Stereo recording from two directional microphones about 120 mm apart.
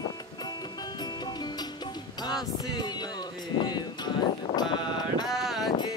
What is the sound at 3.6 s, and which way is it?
Speech, 35° left (ahead or behind).